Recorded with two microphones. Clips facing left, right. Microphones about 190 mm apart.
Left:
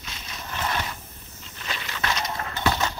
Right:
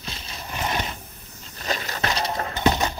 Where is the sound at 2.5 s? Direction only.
20° right (ahead or behind).